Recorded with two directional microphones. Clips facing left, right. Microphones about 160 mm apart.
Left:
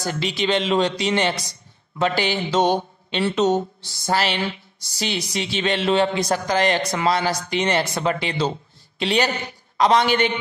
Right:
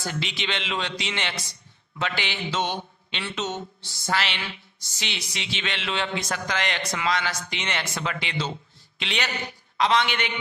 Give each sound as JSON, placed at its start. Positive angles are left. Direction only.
{"t": 0.0, "sound": "speech", "side_deg": 40}